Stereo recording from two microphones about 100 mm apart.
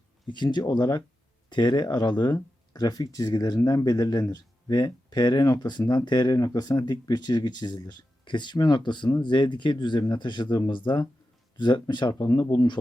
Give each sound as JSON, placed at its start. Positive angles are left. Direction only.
{"t": 0.3, "sound": "speech", "side_deg": 50}
{"t": 6.3, "sound": "speech", "side_deg": 35}